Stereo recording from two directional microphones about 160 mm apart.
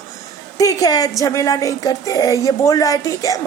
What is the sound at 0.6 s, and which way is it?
A woman's voice, 20° left (ahead or behind).